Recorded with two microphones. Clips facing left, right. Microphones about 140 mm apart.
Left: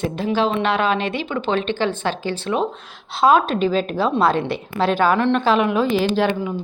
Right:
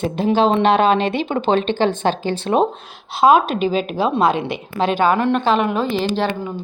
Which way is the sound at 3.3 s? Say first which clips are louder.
Right 1 dB; 15° right (ahead or behind).